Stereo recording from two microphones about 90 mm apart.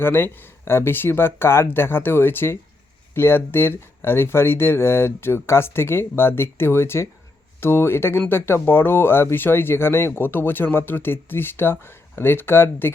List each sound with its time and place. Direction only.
0.0 s speech: 25° left (ahead or behind)